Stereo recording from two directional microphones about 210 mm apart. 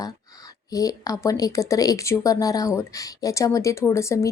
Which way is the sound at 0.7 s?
15° left (ahead or behind).